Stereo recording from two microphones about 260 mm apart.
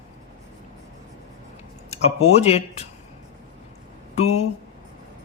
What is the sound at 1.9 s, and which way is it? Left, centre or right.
Speech, left.